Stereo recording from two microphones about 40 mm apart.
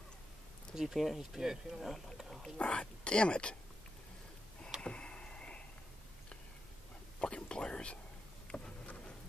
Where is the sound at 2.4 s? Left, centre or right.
Left.